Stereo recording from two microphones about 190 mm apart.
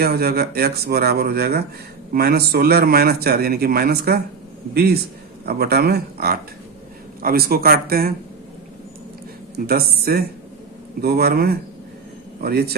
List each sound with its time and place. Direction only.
0.0 s a man's voice: 55° right (ahead or behind)
9.6 s a man's voice: 55° right (ahead or behind)